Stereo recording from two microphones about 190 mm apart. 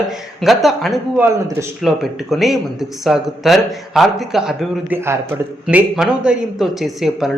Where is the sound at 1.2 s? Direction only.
15° right (ahead or behind).